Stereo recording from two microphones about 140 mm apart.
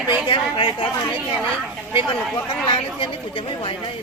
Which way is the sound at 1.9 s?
35° left (ahead or behind).